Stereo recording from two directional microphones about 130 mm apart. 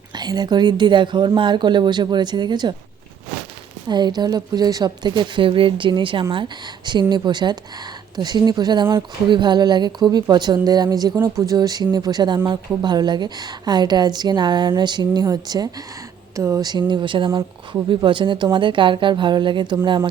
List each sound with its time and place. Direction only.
0.1 s speech: 35° right (ahead or behind)
3.8 s speech: 35° right (ahead or behind)